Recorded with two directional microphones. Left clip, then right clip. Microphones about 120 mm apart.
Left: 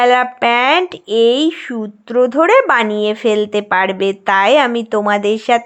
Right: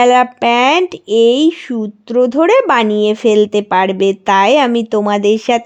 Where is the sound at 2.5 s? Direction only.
60° right (ahead or behind).